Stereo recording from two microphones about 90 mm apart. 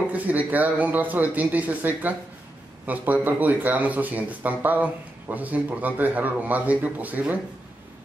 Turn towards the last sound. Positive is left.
turn(degrees=-20)  # may be behind; listen again after turning